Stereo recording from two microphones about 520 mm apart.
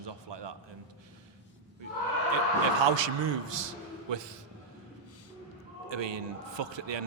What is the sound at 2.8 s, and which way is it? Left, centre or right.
A man's voice, right.